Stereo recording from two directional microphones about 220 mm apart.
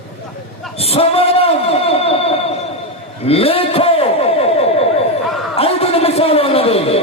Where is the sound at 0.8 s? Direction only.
25° left (ahead or behind).